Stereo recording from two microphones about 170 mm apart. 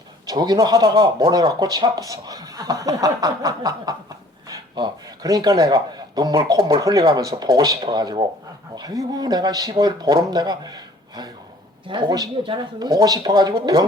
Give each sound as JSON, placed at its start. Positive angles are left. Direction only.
{"t": 0.3, "sound": "a man's voice", "side_deg": -25}